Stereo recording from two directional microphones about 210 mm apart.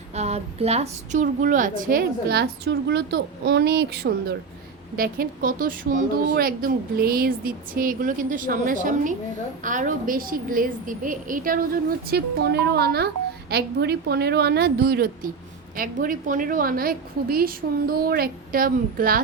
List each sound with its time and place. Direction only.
0.1 s a woman's voice: 30° right (ahead or behind)